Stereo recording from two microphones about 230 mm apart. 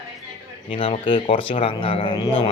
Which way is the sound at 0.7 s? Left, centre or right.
Left.